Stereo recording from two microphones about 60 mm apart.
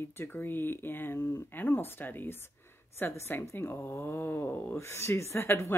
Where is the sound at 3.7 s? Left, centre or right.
Left.